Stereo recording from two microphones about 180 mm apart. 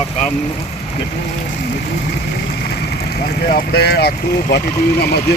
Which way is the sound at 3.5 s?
55° left (ahead or behind).